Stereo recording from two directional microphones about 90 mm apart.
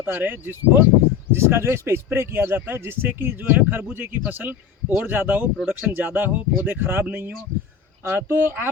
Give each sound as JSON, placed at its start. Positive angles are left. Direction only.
{"t": 0.0, "sound": "speech", "side_deg": -20}